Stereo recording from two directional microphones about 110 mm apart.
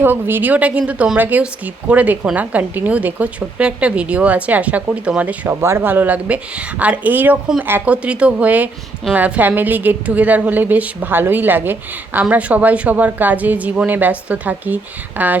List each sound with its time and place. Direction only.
0.0 s a woman's voice: 20° right (ahead or behind)